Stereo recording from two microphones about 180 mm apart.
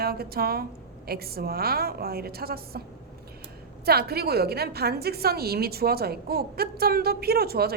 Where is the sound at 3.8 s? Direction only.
60° right (ahead or behind).